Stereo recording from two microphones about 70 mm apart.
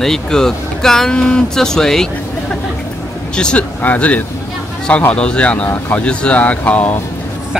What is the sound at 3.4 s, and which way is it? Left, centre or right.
Speech, centre.